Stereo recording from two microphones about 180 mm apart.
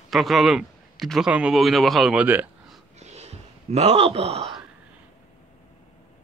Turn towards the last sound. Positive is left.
turn(degrees=-35)  # may be behind; listen again after turning